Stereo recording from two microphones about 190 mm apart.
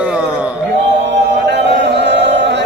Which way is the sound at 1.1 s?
65° right (ahead or behind).